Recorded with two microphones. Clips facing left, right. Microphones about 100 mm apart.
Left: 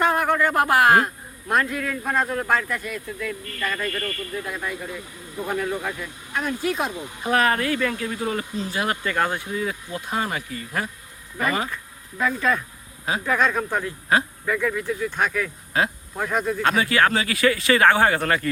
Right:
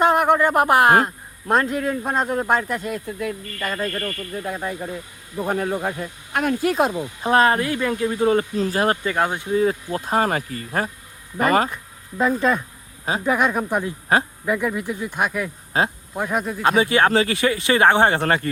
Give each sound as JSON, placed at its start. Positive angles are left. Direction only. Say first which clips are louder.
{"t": 0.0, "sound": "a man's voice", "louder": "right 4 dB", "side_deg": -20}
{"t": 6.3, "sound": "speech", "louder": "right 5 dB", "side_deg": -55}
{"t": 7.2, "sound": "a man's voice", "louder": "right 4 dB", "side_deg": -30}
{"t": 9.0, "sound": "a man's voice", "louder": "right 2 dB", "side_deg": -20}
{"t": 9.5, "sound": "speech", "louder": "right 8 dB", "side_deg": -35}
{"t": 11.7, "sound": "a sound", "louder": "right 1 dB", "side_deg": -25}
{"t": 12.4, "sound": "a man's voice", "louder": "right 3 dB", "side_deg": -25}
{"t": 15.7, "sound": "a man's voice", "louder": "right 2 dB", "side_deg": -30}
{"t": 16.1, "sound": "speech", "louder": "even", "side_deg": -10}
{"t": 16.7, "sound": "a man's voice", "louder": "right 5 dB", "side_deg": -25}